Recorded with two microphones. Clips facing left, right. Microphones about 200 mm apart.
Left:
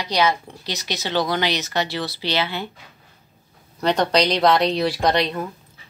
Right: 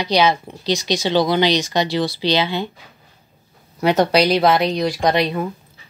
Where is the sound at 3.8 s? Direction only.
10° right (ahead or behind).